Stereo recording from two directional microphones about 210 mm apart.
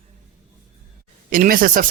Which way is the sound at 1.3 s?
40° right (ahead or behind).